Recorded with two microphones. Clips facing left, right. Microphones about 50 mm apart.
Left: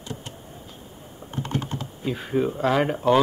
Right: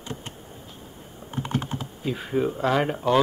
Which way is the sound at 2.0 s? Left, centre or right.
Centre.